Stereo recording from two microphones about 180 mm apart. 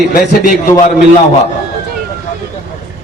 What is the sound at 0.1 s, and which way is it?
Speech, 50° left (ahead or behind).